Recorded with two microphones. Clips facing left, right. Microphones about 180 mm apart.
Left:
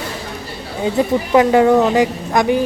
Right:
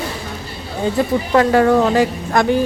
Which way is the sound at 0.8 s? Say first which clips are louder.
Left 1 dB; 15° left (ahead or behind).